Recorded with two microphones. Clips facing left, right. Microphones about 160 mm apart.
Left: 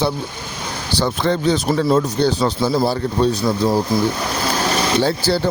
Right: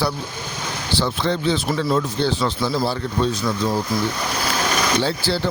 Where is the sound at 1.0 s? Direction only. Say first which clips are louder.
Left 4 dB; 50° left (ahead or behind).